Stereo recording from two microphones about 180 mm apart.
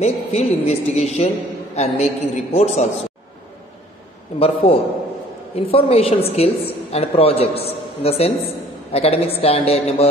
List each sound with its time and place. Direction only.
0.0 s a woman's voice: 35° left (ahead or behind)
4.4 s a woman's voice: 30° left (ahead or behind)